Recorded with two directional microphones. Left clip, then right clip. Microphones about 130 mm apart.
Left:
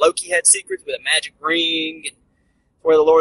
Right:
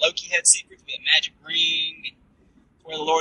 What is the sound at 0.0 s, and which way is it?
Speech, 40° left (ahead or behind).